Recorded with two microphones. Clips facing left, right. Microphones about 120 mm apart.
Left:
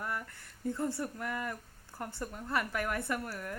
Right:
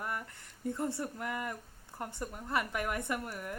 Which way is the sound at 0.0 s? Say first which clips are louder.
Even; 20° right (ahead or behind).